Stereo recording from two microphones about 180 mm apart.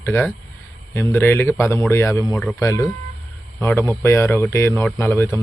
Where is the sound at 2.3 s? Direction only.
5° left (ahead or behind).